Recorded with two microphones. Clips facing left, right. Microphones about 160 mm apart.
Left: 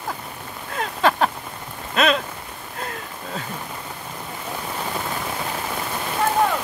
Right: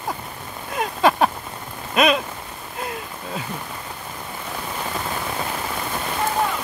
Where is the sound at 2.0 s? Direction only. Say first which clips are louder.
Right 2 dB; 15° right (ahead or behind).